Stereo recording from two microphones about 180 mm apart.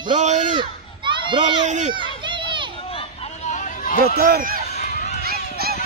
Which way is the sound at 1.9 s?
25° right (ahead or behind).